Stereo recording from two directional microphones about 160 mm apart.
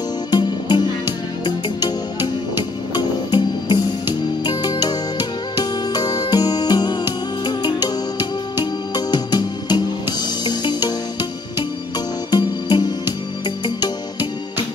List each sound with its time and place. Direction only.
0.3 s music: 30° left (ahead or behind)